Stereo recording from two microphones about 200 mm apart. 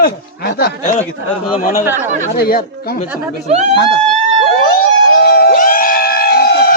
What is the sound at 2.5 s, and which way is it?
Speech, 50° left (ahead or behind).